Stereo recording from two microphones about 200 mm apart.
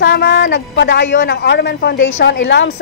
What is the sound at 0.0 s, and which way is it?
A man's voice, 55° left (ahead or behind).